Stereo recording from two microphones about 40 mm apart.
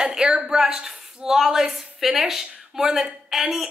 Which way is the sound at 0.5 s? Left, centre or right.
Centre.